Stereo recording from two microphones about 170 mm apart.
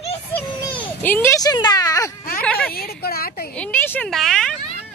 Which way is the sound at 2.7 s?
65° left (ahead or behind).